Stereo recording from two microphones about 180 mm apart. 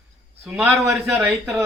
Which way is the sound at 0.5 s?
Centre (ahead or behind).